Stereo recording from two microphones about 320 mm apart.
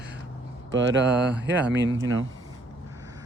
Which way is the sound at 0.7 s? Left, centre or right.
Right.